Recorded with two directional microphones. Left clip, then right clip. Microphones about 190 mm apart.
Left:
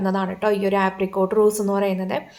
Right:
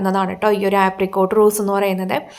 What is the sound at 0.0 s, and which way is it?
A woman's voice, 25° right (ahead or behind).